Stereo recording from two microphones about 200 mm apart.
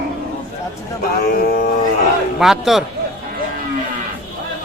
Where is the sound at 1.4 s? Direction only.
50° left (ahead or behind).